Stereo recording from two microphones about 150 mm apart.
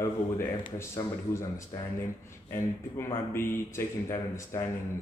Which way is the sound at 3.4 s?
15° left (ahead or behind).